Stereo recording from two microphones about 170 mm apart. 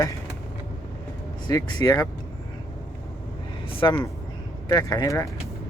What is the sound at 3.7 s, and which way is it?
Speech, 30° left (ahead or behind).